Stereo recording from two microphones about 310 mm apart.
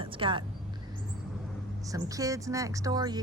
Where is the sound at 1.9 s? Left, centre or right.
Centre.